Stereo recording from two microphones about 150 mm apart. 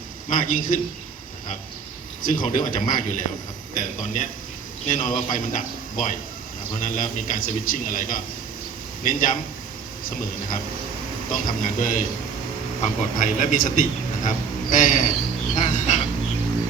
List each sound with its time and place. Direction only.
0.3 s a man's voice: 65° left (ahead or behind)
2.2 s a man's voice: 65° left (ahead or behind)
11.3 s a man's voice: 60° left (ahead or behind)
15.5 s a sound: 55° left (ahead or behind)